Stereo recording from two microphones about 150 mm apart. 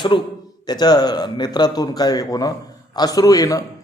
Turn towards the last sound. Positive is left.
turn(degrees=25)  # may be behind; listen again after turning